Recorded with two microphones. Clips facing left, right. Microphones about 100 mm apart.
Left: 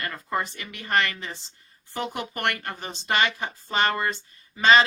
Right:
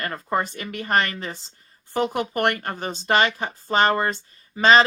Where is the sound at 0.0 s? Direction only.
40° right (ahead or behind).